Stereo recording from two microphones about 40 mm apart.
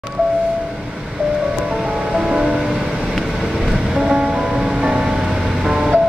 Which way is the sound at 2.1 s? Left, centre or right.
Centre.